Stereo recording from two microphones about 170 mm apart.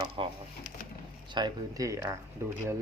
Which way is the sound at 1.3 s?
25° right (ahead or behind).